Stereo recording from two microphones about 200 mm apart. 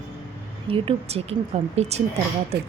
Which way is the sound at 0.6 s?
25° right (ahead or behind).